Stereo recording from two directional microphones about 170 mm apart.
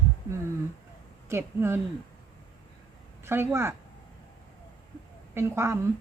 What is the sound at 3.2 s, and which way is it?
Speech, 15° right (ahead or behind).